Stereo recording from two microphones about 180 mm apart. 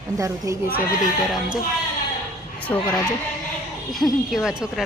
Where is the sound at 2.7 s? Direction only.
15° left (ahead or behind).